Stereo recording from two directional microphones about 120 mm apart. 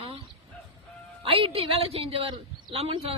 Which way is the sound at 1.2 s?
50° right (ahead or behind).